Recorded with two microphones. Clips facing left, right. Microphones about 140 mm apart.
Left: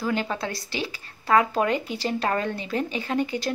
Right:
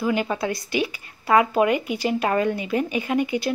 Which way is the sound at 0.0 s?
10° right (ahead or behind).